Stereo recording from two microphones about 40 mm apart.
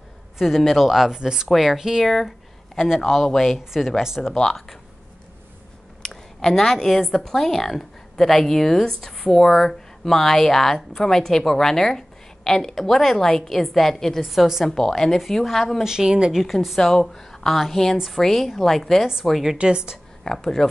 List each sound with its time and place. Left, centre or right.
0.4 s a woman's voice: centre
1.1 s a woman's voice: centre
1.5 s a woman's voice: centre
2.1 s a sound: centre
3.0 s a woman's voice: centre
3.5 s a woman's voice: centre
4.3 s a woman's voice: centre
6.0 s a woman's voice: centre
14.2 s a woman's voice: centre
14.7 s a woman's voice: centre
15.8 s a woman's voice: centre
19.6 s a woman's voice: right
20.3 s a woman's voice: centre